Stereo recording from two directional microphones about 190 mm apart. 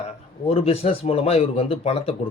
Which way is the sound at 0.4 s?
30° left (ahead or behind).